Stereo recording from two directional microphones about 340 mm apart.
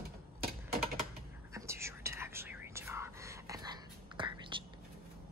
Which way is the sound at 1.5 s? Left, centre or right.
Centre.